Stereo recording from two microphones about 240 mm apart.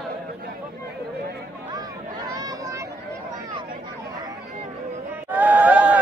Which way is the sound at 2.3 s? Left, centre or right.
Centre.